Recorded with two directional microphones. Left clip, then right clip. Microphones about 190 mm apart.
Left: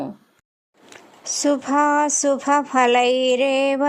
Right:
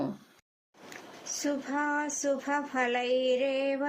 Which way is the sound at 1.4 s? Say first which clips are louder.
Left 13 dB; 40° left (ahead or behind).